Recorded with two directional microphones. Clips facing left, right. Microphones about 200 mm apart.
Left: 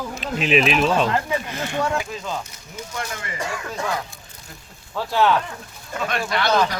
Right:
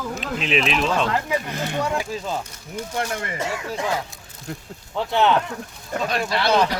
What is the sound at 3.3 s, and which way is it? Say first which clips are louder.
Speech: left 2 dB; 20° right (ahead or behind).